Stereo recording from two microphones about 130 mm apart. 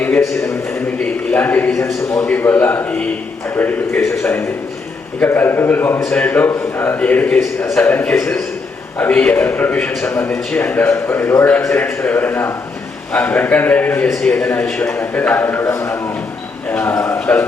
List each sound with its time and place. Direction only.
0.0 s a man's voice: 15° left (ahead or behind)
14.1 s a man's voice: centre (ahead or behind)